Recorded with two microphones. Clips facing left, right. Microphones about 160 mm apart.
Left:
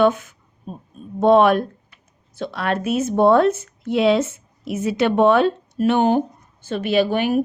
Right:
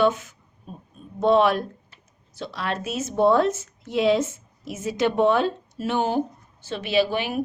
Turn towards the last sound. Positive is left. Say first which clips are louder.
# left 4 dB
turn(degrees=50)  # may be behind; listen again after turning